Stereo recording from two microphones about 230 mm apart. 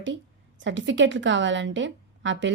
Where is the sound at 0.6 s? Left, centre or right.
Right.